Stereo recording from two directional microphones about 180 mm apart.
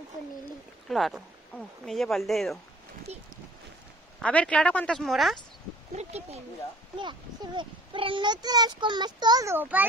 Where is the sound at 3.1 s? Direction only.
35° right (ahead or behind).